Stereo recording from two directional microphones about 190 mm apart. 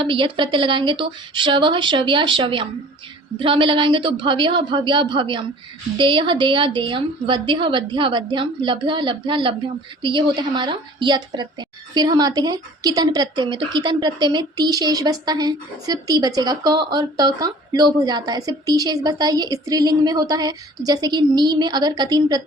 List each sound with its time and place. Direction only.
0.0 s a woman's voice: 25° right (ahead or behind)